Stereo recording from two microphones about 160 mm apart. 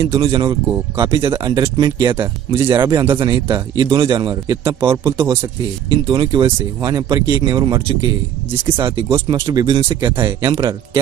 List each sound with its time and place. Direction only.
0.1 s speech: 35° right (ahead or behind)